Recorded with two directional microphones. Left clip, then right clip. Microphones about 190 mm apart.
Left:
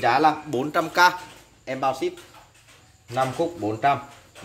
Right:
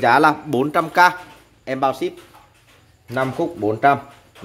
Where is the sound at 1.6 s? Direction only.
55° right (ahead or behind).